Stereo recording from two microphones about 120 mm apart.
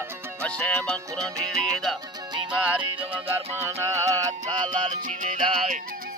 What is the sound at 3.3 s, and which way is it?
Music, 25° right (ahead or behind).